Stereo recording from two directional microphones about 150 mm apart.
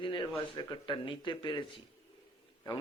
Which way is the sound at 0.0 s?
35° left (ahead or behind).